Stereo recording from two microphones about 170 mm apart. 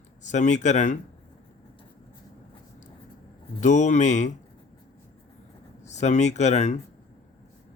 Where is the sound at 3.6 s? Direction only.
45° left (ahead or behind).